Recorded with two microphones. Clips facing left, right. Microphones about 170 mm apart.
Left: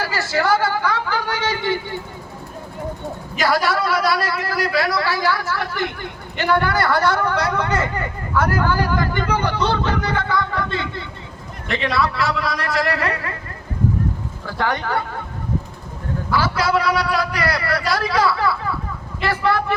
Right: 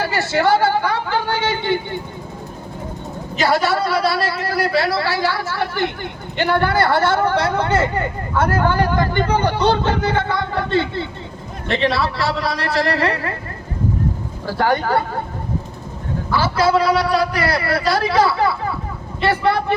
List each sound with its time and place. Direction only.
0.0 s a woman's voice: 25° right (ahead or behind)
3.3 s speech: 25° right (ahead or behind)
14.4 s speech: 30° right (ahead or behind)
16.4 s speech: 25° right (ahead or behind)